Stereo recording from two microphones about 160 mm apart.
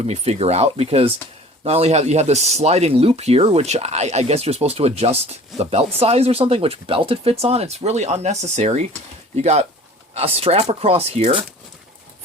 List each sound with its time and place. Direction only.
0.1 s speech: 40° right (ahead or behind)